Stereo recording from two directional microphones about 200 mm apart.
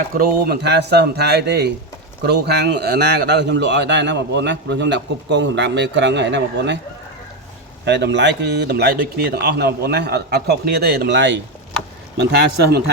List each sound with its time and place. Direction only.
0.1 s a man's voice: 50° right (ahead or behind)
7.9 s a man's voice: 60° right (ahead or behind)